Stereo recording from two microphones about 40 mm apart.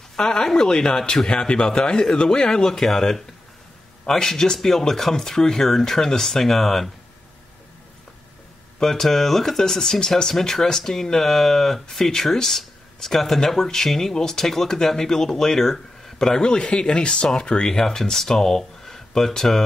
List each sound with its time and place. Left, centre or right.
0.1 s speech: centre
8.8 s speech: centre; by 17.7 s left
17.7 s speech: centre